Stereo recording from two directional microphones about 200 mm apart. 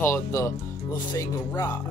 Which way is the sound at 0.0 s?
15° left (ahead or behind).